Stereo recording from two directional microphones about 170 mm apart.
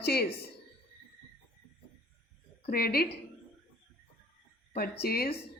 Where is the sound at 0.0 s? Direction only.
70° left (ahead or behind).